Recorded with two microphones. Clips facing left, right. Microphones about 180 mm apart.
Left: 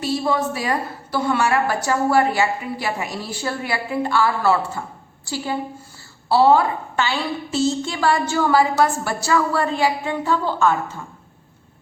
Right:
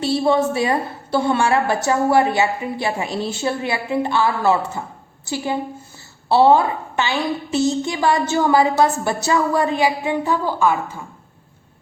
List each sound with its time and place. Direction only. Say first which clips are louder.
0.0 s a woman's voice: right 4 dB; 25° right (ahead or behind); by 11.0 s 10° right (ahead or behind)